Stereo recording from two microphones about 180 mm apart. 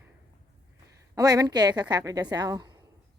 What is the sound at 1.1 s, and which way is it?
A woman's voice, 20° right (ahead or behind).